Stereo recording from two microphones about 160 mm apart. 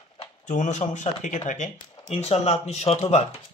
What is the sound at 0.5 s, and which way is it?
Speech, 50° left (ahead or behind).